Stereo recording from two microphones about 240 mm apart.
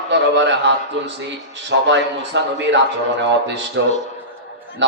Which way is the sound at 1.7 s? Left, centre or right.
Right.